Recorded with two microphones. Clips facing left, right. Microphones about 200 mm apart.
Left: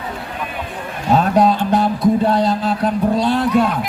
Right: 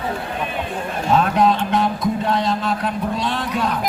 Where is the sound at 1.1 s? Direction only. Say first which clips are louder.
Left 3 dB; 35° left (ahead or behind).